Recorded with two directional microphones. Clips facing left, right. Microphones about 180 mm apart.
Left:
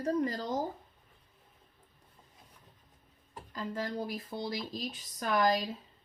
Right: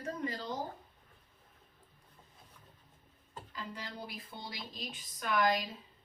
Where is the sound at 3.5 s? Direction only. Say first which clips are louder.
Left 9 dB; 45° left (ahead or behind).